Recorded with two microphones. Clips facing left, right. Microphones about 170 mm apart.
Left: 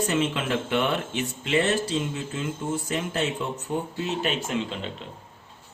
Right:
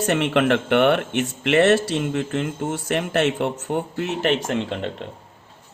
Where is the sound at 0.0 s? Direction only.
70° right (ahead or behind).